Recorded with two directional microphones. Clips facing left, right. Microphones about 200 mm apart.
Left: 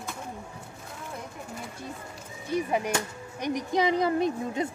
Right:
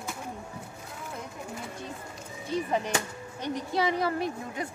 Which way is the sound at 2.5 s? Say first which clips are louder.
Left 2 dB; 10° left (ahead or behind).